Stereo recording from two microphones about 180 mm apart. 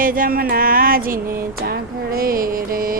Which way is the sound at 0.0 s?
50° right (ahead or behind).